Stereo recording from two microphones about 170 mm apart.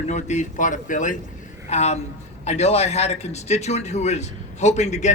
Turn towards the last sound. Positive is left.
turn(degrees=45)  # may be behind; listen again after turning